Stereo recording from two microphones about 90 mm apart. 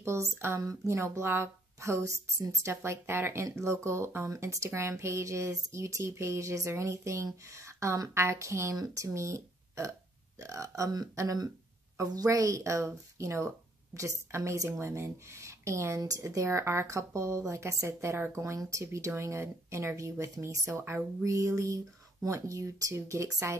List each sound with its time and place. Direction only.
0.0 s a woman's voice: 30° right (ahead or behind)